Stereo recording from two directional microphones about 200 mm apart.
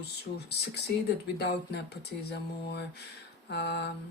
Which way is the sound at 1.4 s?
55° left (ahead or behind).